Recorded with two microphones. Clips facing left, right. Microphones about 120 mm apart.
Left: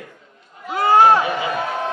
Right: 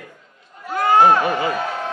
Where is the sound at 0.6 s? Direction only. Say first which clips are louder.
Left 1 dB; 10° left (ahead or behind).